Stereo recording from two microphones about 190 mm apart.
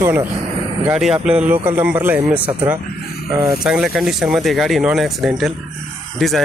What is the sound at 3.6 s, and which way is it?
Speech, 5° right (ahead or behind).